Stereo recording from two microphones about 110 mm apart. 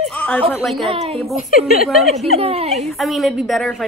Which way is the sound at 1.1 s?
Centre (ahead or behind).